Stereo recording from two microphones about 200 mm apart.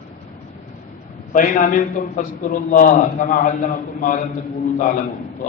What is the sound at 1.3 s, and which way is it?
A man's voice, 40° left (ahead or behind).